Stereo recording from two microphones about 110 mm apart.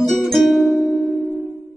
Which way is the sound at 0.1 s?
Centre (ahead or behind).